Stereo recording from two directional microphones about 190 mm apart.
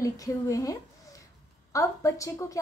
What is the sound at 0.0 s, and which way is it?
A woman's voice, 15° left (ahead or behind).